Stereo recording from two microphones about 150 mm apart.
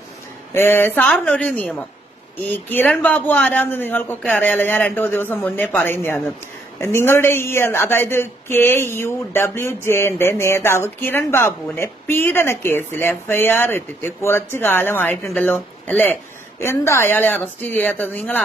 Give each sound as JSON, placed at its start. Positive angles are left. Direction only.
{"t": 0.5, "sound": "a woman's voice", "side_deg": 15}